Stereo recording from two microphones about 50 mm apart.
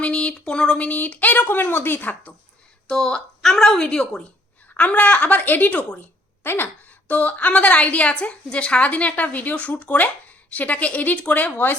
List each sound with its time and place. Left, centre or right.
0.0 s speech: left
0.9 s a woman's voice: left
2.9 s speech: centre
4.7 s a woman's voice: left
6.4 s speech: left
7.1 s a woman's voice: left